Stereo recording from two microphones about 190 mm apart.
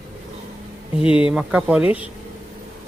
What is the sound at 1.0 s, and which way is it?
Speech, 5° right (ahead or behind).